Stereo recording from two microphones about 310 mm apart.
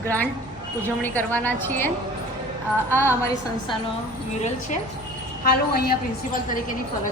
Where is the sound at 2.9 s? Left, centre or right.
Centre.